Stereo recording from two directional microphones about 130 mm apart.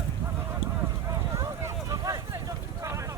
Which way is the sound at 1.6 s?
25° right (ahead or behind).